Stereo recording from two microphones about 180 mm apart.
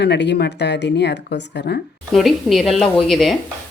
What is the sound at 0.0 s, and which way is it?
Speech, 70° left (ahead or behind).